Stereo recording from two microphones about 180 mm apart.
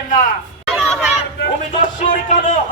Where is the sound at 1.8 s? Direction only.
45° left (ahead or behind).